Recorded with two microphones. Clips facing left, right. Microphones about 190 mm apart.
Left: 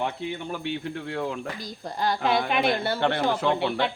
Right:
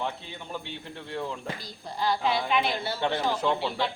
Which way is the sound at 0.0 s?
65° left (ahead or behind).